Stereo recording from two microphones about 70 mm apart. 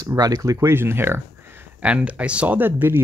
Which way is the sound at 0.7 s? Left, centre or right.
Right.